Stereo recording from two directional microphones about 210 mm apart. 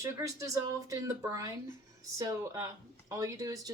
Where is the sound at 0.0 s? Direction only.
15° right (ahead or behind).